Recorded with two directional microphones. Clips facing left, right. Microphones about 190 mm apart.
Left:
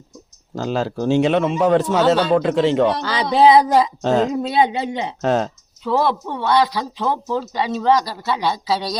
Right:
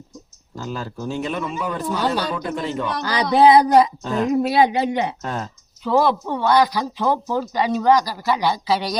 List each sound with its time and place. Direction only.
0.5 s a man's voice: 90° left
2.9 s speech: 25° left (ahead or behind)
4.0 s a man's voice: 90° left
4.3 s speech: 25° left (ahead or behind)
5.2 s a man's voice: 85° left
6.5 s speech: 25° left (ahead or behind)
6.9 s speech: 15° right (ahead or behind)
7.5 s speech: 25° left (ahead or behind)